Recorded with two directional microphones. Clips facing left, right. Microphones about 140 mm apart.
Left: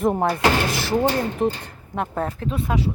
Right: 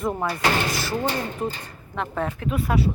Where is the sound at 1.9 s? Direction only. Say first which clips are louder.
Left 2 dB; 40° left (ahead or behind).